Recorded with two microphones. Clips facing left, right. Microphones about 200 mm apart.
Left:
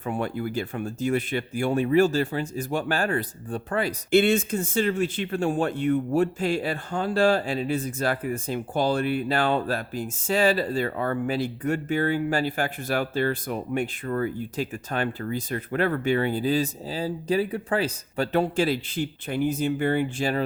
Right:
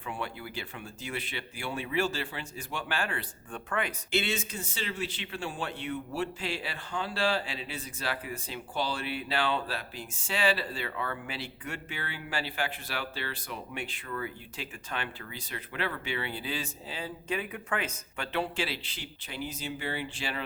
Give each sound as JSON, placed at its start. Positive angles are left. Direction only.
{"t": 0.0, "sound": "speech", "side_deg": 45}
{"t": 4.1, "sound": "speech", "side_deg": 50}